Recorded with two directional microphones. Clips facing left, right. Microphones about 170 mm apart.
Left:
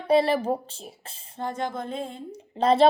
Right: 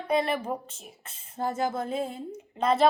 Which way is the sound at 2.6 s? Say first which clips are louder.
Left 4 dB; 30° left (ahead or behind).